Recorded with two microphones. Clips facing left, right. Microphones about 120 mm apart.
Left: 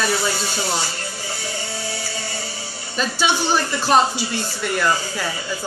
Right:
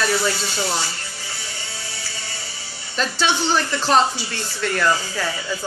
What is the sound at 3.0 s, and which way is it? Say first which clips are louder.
Speech: left 1 dB; 10° left (ahead or behind).